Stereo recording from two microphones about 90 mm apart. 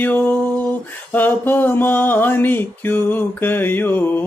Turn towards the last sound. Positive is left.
turn(degrees=20)  # may be behind; listen again after turning